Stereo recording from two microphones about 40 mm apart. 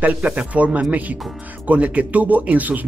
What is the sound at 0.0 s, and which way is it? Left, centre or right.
Speech, right.